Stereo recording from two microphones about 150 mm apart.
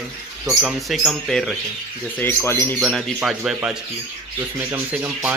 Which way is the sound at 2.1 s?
15° left (ahead or behind).